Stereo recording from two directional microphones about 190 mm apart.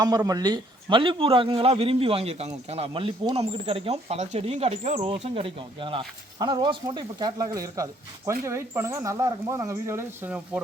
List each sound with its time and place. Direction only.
0.0 s a man's voice: 20° right (ahead or behind)